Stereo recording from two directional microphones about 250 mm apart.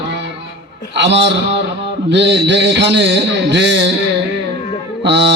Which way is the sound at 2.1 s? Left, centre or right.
Right.